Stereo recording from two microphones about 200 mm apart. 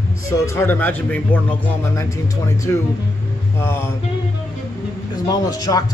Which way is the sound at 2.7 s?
15° left (ahead or behind).